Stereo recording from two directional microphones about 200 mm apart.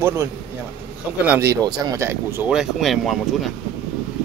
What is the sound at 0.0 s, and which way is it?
Speech, 15° right (ahead or behind).